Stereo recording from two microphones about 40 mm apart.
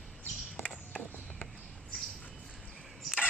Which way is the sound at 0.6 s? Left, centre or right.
Centre.